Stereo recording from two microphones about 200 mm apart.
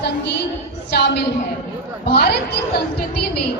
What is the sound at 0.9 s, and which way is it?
A woman's voice, 55° left (ahead or behind).